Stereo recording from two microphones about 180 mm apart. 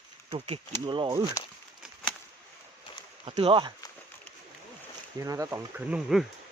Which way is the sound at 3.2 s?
30° right (ahead or behind).